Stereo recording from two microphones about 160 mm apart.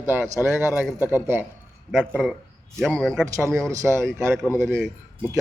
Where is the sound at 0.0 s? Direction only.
15° right (ahead or behind); by 3.2 s 5° left (ahead or behind).